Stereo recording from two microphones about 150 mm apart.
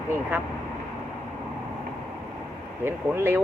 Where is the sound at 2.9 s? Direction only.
15° right (ahead or behind).